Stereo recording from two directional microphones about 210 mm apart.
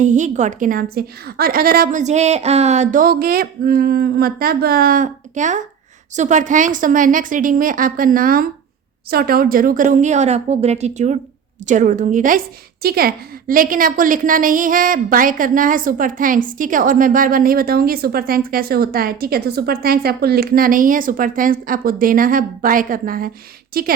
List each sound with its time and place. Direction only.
0.0 s a woman's voice: 35° right (ahead or behind)